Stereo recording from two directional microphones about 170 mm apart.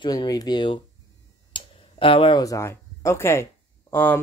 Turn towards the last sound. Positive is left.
turn(degrees=10)  # may be behind; listen again after turning